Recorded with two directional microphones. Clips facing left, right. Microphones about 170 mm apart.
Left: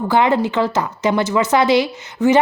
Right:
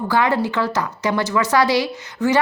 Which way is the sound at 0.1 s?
20° left (ahead or behind).